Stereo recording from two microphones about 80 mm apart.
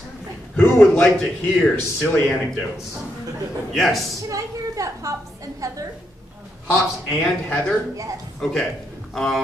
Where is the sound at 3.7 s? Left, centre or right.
Centre.